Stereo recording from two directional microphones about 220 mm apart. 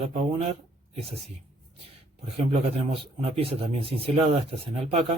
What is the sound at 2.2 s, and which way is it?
Speech, 25° right (ahead or behind).